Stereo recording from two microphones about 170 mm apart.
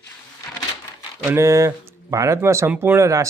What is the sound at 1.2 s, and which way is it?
A man's voice, 15° right (ahead or behind).